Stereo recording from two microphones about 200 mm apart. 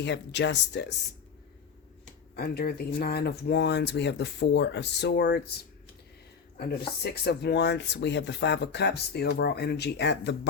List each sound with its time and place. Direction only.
0.0 s speech: 60° left (ahead or behind)
2.3 s speech: 50° left (ahead or behind)